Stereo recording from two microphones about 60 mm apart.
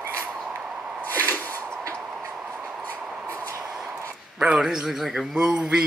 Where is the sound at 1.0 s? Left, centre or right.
Left.